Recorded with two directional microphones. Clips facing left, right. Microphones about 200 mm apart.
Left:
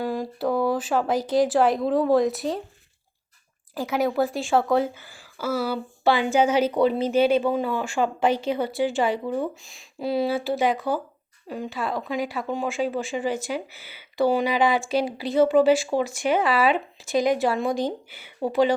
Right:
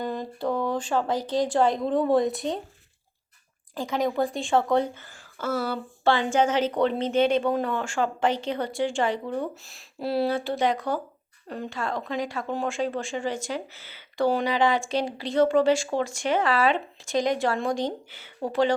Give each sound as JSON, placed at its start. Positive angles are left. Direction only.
{"t": 0.0, "sound": "speech", "side_deg": 10}
{"t": 3.8, "sound": "a woman's voice", "side_deg": 5}